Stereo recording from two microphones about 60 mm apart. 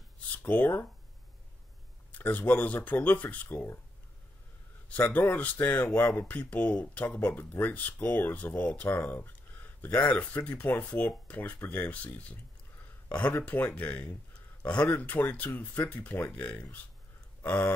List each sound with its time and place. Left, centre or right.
0.5 s speech: left
2.1 s speech: left
3.4 s speech: left
5.1 s speech: left
8.7 s a sound: left
9.9 s speech: left